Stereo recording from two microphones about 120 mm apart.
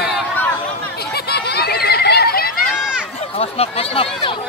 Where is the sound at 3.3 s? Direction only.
55° left (ahead or behind).